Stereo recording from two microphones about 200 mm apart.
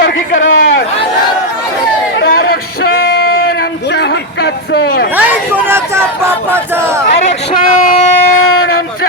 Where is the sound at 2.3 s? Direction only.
50° left (ahead or behind).